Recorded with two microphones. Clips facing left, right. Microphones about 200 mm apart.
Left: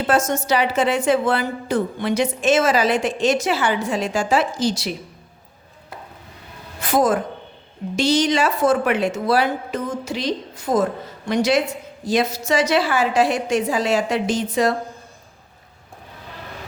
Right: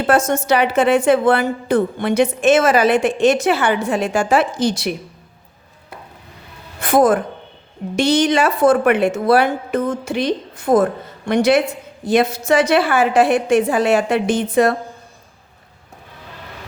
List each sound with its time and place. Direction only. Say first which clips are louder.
0.1 s a woman's voice: right 4 dB; 60° right (ahead or behind)
6.7 s music: right 4 dB; 55° right (ahead or behind)
7.9 s a woman's voice: right 3 dB; 55° right (ahead or behind)